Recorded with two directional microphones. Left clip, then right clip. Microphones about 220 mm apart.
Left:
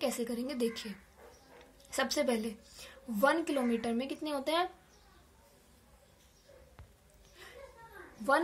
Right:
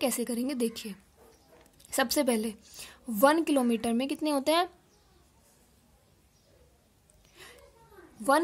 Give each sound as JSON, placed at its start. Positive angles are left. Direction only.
{"t": 0.0, "sound": "a woman's voice", "side_deg": -40}